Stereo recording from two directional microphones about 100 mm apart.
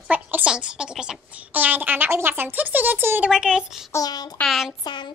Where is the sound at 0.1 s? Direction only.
15° right (ahead or behind).